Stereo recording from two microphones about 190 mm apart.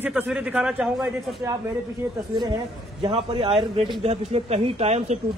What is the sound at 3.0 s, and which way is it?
Speech, 30° right (ahead or behind).